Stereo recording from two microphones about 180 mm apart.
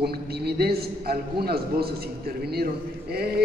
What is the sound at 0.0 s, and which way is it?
A man's voice, 60° right (ahead or behind).